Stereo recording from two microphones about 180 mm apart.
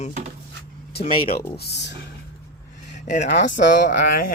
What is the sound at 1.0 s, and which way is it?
Speech, 30° left (ahead or behind).